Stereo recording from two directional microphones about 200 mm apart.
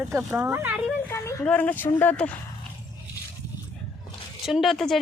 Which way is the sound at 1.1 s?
15° left (ahead or behind).